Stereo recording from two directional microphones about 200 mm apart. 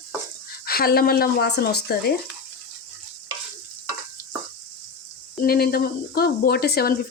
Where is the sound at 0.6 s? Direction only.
50° left (ahead or behind).